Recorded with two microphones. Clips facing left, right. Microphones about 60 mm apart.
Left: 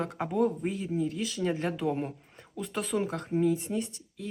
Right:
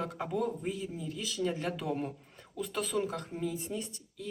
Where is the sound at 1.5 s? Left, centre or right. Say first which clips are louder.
Left 4 dB; centre.